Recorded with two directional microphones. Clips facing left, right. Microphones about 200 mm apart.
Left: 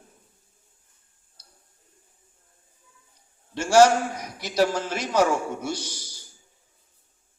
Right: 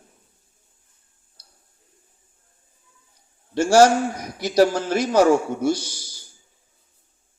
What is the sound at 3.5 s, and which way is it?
A man's voice, 35° right (ahead or behind).